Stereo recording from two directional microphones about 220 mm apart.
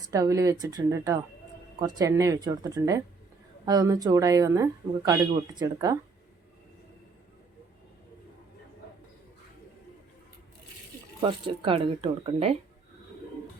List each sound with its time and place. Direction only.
0.0 s speech: 15° right (ahead or behind)
11.2 s speech: 25° right (ahead or behind)